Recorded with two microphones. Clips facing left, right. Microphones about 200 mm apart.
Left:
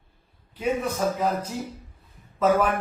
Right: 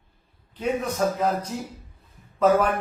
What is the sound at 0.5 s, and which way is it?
A man's voice, 10° left (ahead or behind).